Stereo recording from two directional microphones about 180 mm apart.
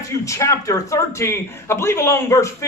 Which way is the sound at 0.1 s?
15° left (ahead or behind).